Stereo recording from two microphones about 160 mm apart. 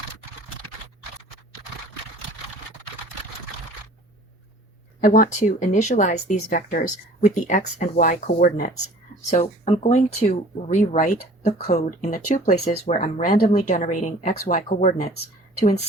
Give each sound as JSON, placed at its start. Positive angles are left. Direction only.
{"t": 4.9, "sound": "speech", "side_deg": 60}
{"t": 5.4, "sound": "speech", "side_deg": 50}
{"t": 9.3, "sound": "speech", "side_deg": 45}